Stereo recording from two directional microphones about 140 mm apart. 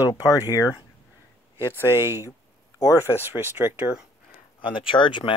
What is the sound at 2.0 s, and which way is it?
Speech, 15° right (ahead or behind).